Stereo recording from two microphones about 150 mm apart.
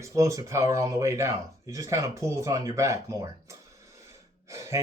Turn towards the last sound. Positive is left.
turn(degrees=-20)  # may be behind; listen again after turning